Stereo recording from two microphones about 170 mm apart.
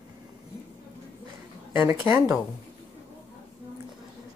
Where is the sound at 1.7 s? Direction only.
15° right (ahead or behind).